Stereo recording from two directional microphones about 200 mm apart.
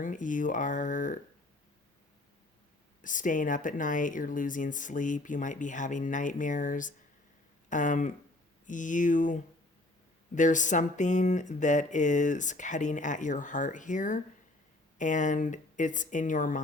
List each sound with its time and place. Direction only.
0.0 s speech: 40° left (ahead or behind)
3.0 s speech: 40° left (ahead or behind)